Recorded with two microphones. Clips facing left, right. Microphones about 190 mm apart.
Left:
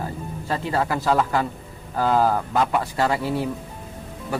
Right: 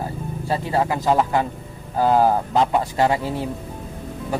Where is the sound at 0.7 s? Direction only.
20° right (ahead or behind).